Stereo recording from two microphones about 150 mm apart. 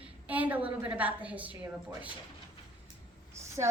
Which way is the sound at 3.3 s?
20° right (ahead or behind).